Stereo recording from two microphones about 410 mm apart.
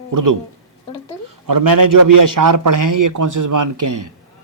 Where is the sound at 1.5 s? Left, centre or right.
Right.